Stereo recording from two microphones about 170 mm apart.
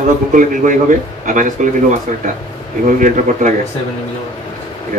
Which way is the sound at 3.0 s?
50° right (ahead or behind).